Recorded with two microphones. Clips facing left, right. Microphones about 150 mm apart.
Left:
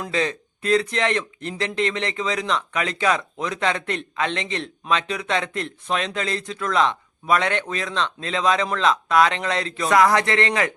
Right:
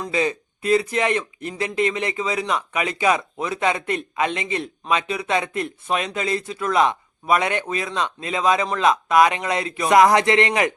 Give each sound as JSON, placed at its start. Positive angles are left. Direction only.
{"t": 0.1, "sound": "speech", "side_deg": -10}